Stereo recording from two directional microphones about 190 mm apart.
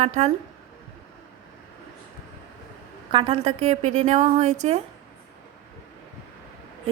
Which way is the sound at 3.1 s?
30° right (ahead or behind).